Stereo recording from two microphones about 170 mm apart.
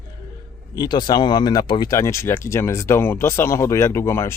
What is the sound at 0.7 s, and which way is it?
Speech, 25° left (ahead or behind).